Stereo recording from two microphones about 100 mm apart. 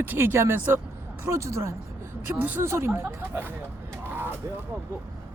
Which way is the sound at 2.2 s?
25° right (ahead or behind).